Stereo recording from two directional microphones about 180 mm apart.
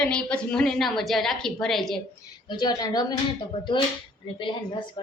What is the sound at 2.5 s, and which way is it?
Speech, 25° left (ahead or behind).